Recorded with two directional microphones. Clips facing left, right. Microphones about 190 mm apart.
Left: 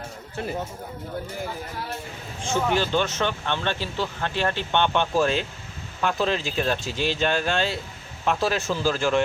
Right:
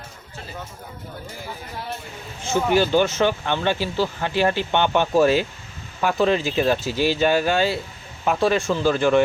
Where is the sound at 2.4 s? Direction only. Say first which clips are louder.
Right 4 dB; 5° right (ahead or behind).